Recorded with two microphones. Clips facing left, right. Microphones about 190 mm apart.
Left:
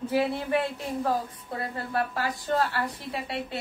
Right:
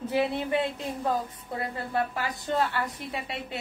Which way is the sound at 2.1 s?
20° right (ahead or behind).